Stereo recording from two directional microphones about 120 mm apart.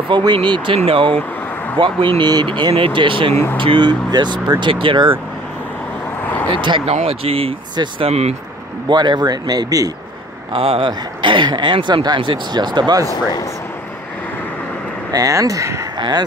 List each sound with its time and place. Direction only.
0.1 s speech: 40° right (ahead or behind)
6.5 s speech: 40° right (ahead or behind)
6.9 s speech: 60° right (ahead or behind)
8.8 s speech: 40° right (ahead or behind)
10.5 s speech: 50° right (ahead or behind); by 13.1 s 35° right (ahead or behind)
13.1 s speech: 35° left (ahead or behind)
15.0 s speech: 30° right (ahead or behind)